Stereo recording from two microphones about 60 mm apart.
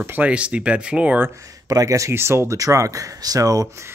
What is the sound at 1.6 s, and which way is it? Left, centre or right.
Speech, right.